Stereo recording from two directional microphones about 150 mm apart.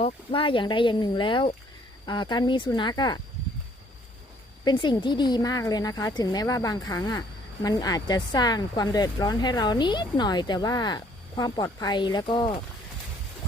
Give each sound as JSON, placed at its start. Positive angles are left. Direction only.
{"t": 0.0, "sound": "speech", "side_deg": 35}
{"t": 4.6, "sound": "a woman's voice", "side_deg": 30}